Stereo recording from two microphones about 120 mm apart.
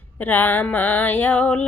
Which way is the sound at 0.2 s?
15° left (ahead or behind).